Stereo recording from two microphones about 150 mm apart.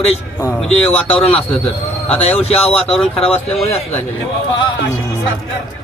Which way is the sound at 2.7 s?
5° left (ahead or behind).